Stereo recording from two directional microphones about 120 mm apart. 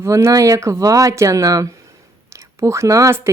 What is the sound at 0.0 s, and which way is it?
Speech, 25° right (ahead or behind).